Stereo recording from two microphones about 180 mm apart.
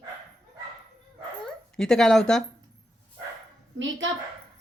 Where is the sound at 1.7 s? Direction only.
5° left (ahead or behind).